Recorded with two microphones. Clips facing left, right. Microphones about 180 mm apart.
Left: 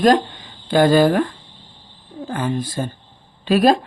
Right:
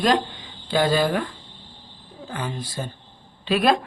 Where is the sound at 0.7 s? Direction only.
50° left (ahead or behind).